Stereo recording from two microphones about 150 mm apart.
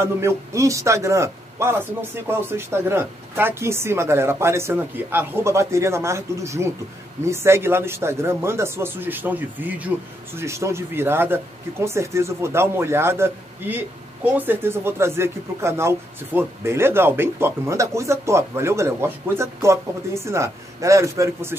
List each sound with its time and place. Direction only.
0.0 s a man's voice: 20° right (ahead or behind)